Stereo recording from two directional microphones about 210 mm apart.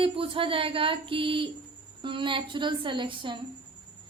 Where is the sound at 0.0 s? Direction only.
25° right (ahead or behind).